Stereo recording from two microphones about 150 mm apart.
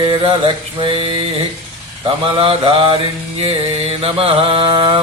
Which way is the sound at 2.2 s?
35° right (ahead or behind).